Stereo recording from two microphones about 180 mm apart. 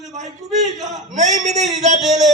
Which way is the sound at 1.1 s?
40° right (ahead or behind).